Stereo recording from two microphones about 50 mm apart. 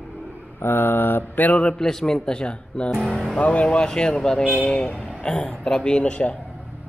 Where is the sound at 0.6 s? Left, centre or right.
Left.